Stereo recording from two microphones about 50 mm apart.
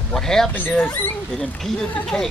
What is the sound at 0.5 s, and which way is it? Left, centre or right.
Speech, left.